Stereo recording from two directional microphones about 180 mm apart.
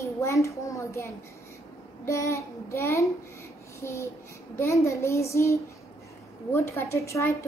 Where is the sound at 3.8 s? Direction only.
15° left (ahead or behind).